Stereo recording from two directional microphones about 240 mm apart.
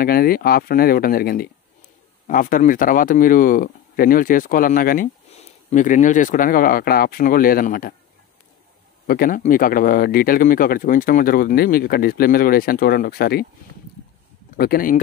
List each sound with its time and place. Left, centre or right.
0.0 s speech: left
9.0 s speech: left
14.6 s speech: left